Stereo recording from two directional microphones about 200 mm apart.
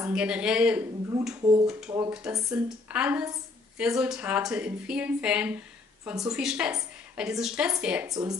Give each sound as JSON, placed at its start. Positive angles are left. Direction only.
{"t": 0.0, "sound": "speech", "side_deg": -5}
{"t": 1.9, "sound": "speech", "side_deg": -15}
{"t": 2.5, "sound": "speech", "side_deg": -5}
{"t": 8.1, "sound": "speech", "side_deg": -15}